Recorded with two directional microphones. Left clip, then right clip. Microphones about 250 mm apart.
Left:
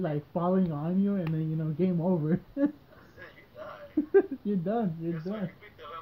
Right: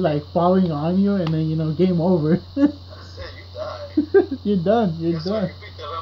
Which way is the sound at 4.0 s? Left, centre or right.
Centre.